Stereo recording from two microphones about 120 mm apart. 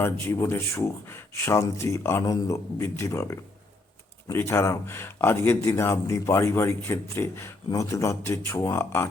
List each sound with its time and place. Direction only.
0.0 s speech: 20° left (ahead or behind)